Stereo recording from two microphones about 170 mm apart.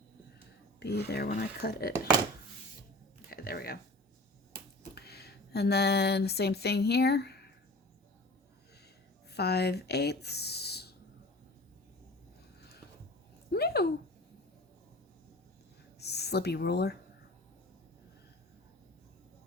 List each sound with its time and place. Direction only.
0.8 s speech: 75° left (ahead or behind)
3.2 s a sound: 60° left (ahead or behind)
4.9 s speech: 70° left (ahead or behind)
9.3 s speech: 75° left (ahead or behind)
13.5 s a sound: 70° left (ahead or behind)
16.0 s speech: 75° left (ahead or behind)